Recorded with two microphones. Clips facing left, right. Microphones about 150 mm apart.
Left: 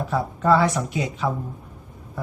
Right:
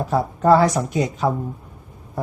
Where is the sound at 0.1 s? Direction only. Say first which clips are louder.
Right 4 dB; 40° right (ahead or behind).